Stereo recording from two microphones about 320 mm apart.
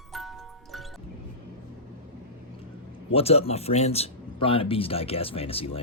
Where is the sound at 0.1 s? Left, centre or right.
Centre.